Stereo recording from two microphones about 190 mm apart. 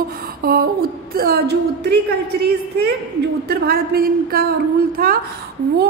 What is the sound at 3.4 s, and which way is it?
A woman's voice, 55° right (ahead or behind).